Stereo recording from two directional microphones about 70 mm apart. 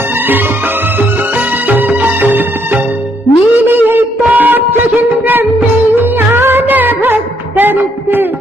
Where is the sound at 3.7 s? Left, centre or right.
Right.